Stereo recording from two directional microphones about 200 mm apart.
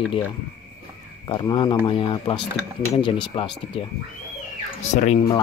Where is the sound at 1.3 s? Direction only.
25° left (ahead or behind).